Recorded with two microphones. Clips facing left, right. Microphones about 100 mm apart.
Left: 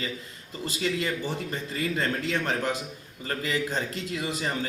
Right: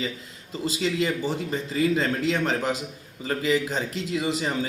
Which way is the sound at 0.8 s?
5° right (ahead or behind).